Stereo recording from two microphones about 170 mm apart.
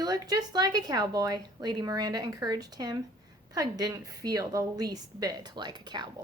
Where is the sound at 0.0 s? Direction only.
25° right (ahead or behind).